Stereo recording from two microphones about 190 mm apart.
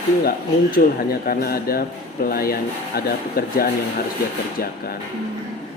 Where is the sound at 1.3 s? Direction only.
50° left (ahead or behind).